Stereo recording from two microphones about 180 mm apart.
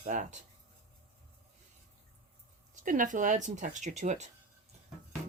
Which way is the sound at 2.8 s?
45° right (ahead or behind).